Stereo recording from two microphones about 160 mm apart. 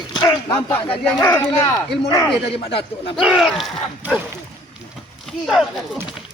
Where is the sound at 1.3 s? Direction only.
15° left (ahead or behind).